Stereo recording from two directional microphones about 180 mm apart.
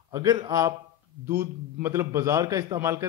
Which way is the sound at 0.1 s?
20° right (ahead or behind).